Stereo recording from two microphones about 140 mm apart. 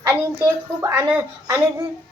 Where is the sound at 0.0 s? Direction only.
20° right (ahead or behind).